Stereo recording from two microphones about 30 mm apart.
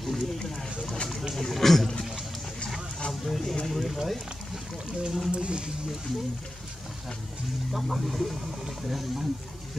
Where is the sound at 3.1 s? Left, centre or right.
Centre.